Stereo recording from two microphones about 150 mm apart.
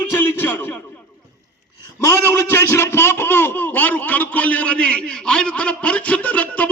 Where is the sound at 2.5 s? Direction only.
20° left (ahead or behind).